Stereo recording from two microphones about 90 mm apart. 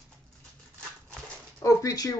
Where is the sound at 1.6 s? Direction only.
40° left (ahead or behind).